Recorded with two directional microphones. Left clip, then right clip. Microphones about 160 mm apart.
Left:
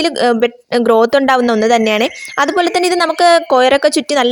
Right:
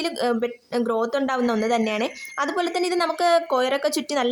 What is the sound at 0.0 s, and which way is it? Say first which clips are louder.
A woman's voice: left 11 dB; 45° left (ahead or behind).